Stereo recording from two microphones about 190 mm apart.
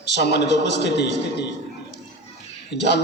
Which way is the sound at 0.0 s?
60° left (ahead or behind).